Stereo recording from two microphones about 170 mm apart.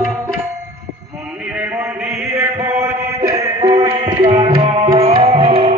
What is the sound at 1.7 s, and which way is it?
Chant, 10° right (ahead or behind).